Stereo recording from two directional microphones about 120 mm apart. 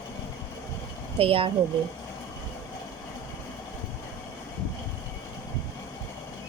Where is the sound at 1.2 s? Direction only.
50° right (ahead or behind).